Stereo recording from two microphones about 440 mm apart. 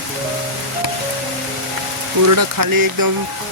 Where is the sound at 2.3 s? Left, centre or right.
Right.